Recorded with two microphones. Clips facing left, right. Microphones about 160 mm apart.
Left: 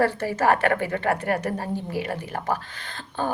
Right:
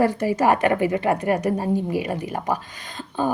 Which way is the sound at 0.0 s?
15° right (ahead or behind).